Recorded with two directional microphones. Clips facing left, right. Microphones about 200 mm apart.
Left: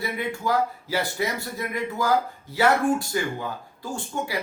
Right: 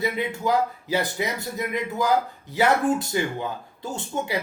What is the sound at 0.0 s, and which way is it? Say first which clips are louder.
Speech: right 3 dB; 20° right (ahead or behind).